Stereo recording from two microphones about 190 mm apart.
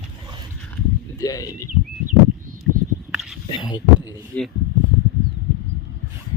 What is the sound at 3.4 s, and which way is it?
Speech, 25° left (ahead or behind).